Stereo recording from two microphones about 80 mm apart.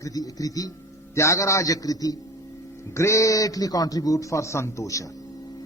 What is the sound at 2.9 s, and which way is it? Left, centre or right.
A man's voice, left.